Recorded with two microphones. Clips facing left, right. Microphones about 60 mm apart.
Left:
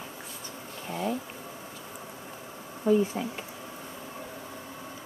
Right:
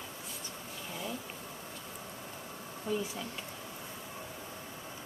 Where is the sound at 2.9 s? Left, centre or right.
Left.